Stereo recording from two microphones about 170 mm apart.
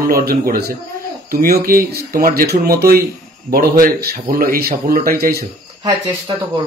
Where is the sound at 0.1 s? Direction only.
60° right (ahead or behind).